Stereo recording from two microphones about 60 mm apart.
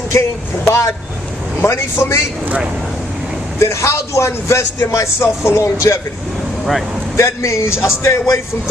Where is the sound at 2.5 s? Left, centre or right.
Right.